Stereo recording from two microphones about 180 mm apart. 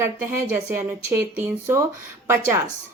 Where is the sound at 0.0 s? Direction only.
15° right (ahead or behind).